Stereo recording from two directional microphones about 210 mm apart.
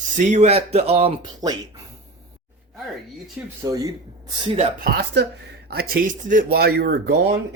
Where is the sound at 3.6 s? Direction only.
15° right (ahead or behind).